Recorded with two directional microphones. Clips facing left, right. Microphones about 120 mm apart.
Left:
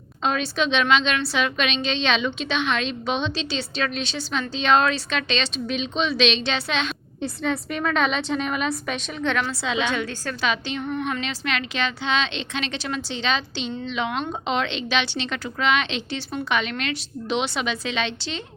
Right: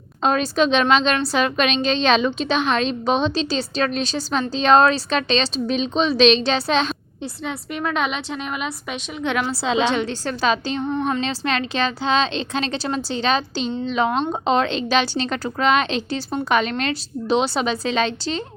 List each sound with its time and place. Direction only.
0.2 s speech: 40° right (ahead or behind)
7.2 s a woman's voice: 10° right (ahead or behind)
9.5 s a woman's voice: 35° right (ahead or behind)
10.4 s speech: 35° right (ahead or behind)